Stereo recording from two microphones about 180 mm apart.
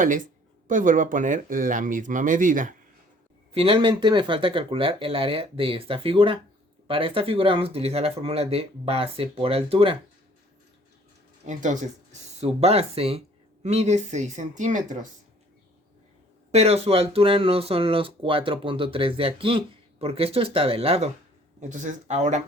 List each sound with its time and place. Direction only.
0.7 s speech: 45° right (ahead or behind)
3.5 s speech: 30° right (ahead or behind)
11.4 s speech: 45° right (ahead or behind)
16.5 s speech: 35° right (ahead or behind)
21.6 s speech: 45° right (ahead or behind)